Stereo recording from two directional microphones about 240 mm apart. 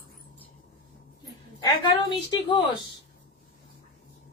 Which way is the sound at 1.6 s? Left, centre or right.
Centre.